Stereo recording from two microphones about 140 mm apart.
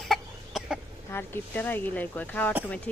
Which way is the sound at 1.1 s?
15° left (ahead or behind).